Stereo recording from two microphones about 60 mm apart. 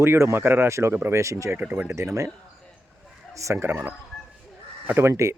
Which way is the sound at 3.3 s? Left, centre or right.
Right.